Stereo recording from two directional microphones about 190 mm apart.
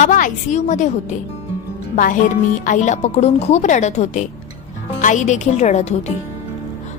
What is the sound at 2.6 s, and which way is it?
Speech, 40° left (ahead or behind).